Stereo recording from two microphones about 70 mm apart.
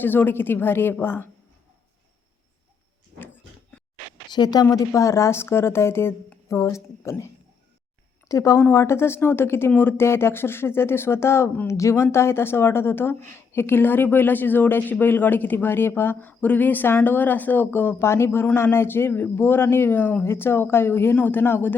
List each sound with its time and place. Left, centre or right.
0.0 s speech: left
4.3 s speech: left
4.9 s speech: left
6.5 s a woman's voice: left
8.3 s speech: left
8.7 s a woman's voice: left